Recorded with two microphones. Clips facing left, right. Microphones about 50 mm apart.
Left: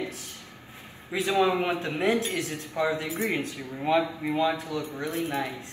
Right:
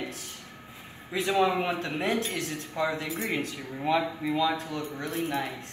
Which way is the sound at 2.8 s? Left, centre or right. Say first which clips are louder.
Left 2 dB; left.